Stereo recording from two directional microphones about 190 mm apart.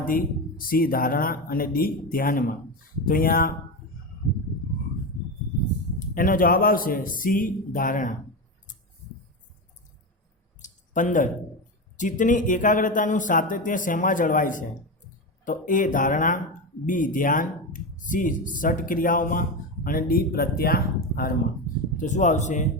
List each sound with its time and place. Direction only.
0.0 s speech: 50° left (ahead or behind)
6.0 s speech: 45° left (ahead or behind)
10.6 s a sound: 40° left (ahead or behind)
11.9 s speech: 40° left (ahead or behind)
21.9 s speech: 40° left (ahead or behind)